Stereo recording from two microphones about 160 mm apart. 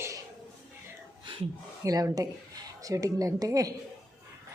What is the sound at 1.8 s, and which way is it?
A woman's voice, 20° right (ahead or behind).